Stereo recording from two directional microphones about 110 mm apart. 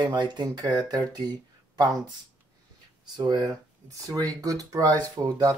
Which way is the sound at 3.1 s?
40° right (ahead or behind).